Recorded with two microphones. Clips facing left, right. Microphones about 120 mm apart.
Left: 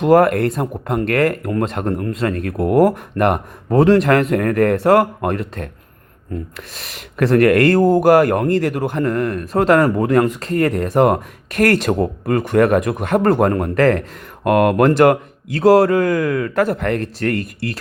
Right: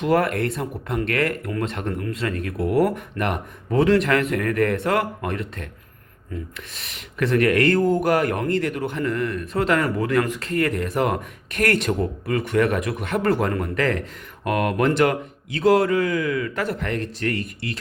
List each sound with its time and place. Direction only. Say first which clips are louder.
0.0 s speech: left 8 dB; 45° left (ahead or behind)
6.7 s speech: left 6 dB; 45° left (ahead or behind)
10.9 s speech: left 8 dB; 45° left (ahead or behind)
11.9 s speech: left 6 dB; 55° left (ahead or behind)
12.4 s speech: left 7 dB; 45° left (ahead or behind)